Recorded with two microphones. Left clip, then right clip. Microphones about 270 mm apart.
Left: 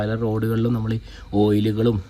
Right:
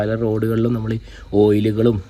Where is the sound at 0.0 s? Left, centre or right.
Centre.